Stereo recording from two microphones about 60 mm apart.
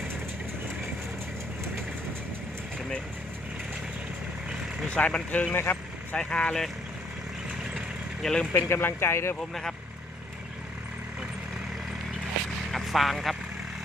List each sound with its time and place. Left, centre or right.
4.9 s speech: centre
5.5 s vehicle: left
6.1 s speech: centre
7.6 s vehicle: centre
8.2 s speech: centre
8.5 s speech: left
9.4 s speech: centre
12.7 s speech: centre